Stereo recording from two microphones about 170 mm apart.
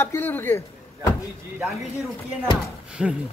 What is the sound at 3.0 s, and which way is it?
Speech, 5° right (ahead or behind).